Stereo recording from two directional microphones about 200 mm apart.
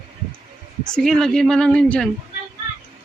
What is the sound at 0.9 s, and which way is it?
Speech, 5° left (ahead or behind).